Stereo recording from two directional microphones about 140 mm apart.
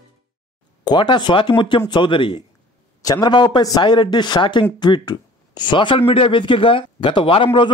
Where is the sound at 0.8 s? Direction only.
35° left (ahead or behind).